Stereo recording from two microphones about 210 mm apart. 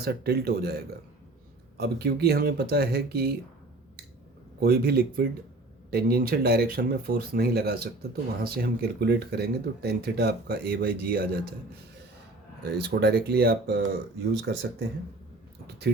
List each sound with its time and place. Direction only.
0.0 s speech: 50° right (ahead or behind)
1.8 s speech: 50° right (ahead or behind)
4.6 s speech: 45° right (ahead or behind)
12.7 s speech: 50° right (ahead or behind)